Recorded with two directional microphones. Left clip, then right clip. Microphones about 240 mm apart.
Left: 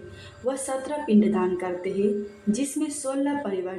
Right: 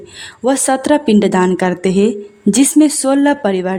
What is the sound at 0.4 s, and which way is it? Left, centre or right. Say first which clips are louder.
Speech: right 15 dB; right.